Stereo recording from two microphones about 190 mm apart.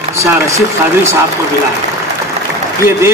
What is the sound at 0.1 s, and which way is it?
Speech, 15° right (ahead or behind).